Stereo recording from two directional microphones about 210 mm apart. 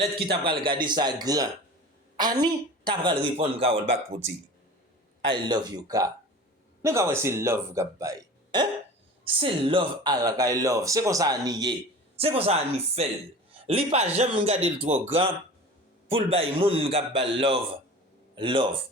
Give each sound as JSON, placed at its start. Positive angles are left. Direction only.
{"t": 0.3, "sound": "speech", "side_deg": -25}
{"t": 5.3, "sound": "speech", "side_deg": -20}